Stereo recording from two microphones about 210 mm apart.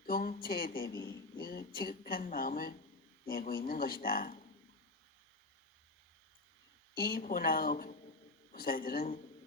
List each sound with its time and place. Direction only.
0.0 s speech: 40° left (ahead or behind)
6.9 s speech: 45° left (ahead or behind)